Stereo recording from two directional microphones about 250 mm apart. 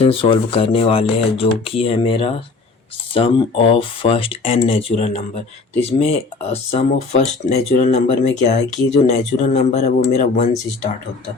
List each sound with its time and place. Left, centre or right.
0.0 s speech: left